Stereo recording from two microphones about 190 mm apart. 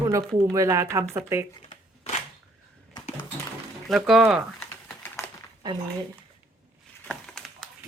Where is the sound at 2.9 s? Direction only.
25° left (ahead or behind).